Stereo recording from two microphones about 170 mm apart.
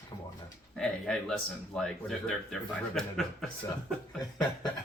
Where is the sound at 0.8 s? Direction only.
5° left (ahead or behind).